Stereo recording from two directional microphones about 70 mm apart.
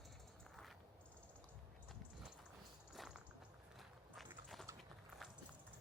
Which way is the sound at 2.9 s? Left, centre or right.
Centre.